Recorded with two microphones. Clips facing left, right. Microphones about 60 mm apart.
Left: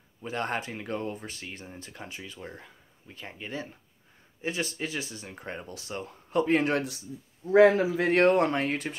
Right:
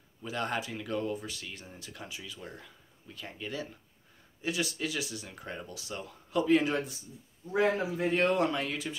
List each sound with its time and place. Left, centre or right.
0.2 s speech: left
7.5 s speech: left